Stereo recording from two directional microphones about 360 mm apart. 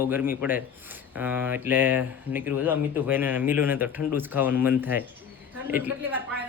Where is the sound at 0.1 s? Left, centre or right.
Centre.